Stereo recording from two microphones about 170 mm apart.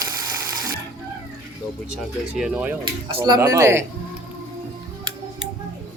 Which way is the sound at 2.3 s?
5° right (ahead or behind).